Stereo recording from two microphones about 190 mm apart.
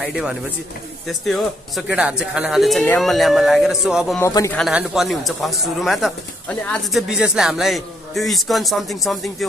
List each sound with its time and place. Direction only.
0.0 s speech: centre (ahead or behind)
4.2 s speech: 15° left (ahead or behind)
4.6 s speech: centre (ahead or behind)